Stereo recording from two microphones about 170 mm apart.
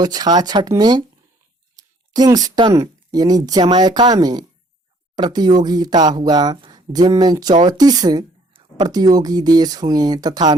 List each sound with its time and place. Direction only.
0.0 s speech: 25° right (ahead or behind)